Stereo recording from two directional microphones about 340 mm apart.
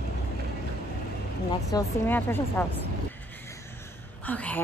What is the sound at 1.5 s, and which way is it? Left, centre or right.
A woman's voice, centre.